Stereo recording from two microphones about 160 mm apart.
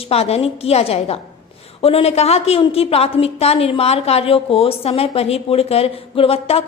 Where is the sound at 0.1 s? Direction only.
40° left (ahead or behind).